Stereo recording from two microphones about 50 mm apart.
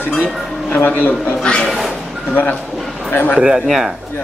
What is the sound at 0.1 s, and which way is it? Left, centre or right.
A man's voice, left.